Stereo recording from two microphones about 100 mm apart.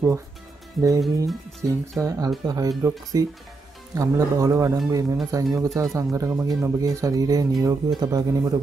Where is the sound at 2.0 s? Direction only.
40° right (ahead or behind).